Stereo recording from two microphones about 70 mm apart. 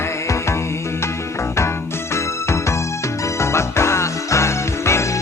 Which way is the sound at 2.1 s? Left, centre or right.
Left.